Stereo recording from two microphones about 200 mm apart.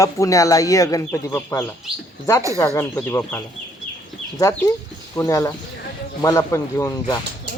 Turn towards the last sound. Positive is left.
turn(degrees=15)  # may be behind; listen again after turning